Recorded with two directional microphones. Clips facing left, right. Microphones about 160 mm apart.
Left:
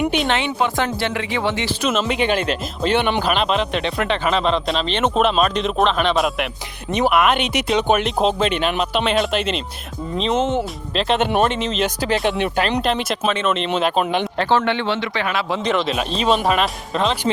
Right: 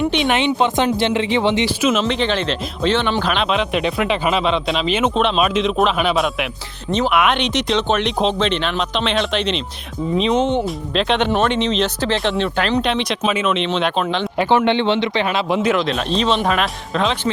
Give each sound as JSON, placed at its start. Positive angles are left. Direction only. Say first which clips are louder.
{"t": 0.3, "sound": "speech", "louder": "right 3 dB", "side_deg": -20}
{"t": 1.8, "sound": "speech", "louder": "right 2 dB", "side_deg": -5}
{"t": 2.0, "sound": "speech", "louder": "even", "side_deg": 10}
{"t": 14.0, "sound": "speech", "louder": "left 1 dB", "side_deg": 15}
{"t": 14.3, "sound": "speech", "louder": "right 5 dB", "side_deg": -20}
{"t": 15.6, "sound": "speech", "louder": "right 2 dB", "side_deg": 0}